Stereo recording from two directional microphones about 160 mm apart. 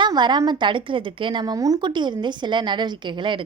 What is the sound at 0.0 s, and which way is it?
Speech, 25° right (ahead or behind).